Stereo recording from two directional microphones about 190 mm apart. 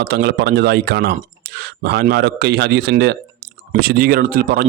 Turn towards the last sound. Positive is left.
turn(degrees=-50)  # may be behind; listen again after turning